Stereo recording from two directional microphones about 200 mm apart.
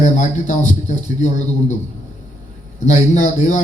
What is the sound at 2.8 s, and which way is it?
Speech, 35° left (ahead or behind).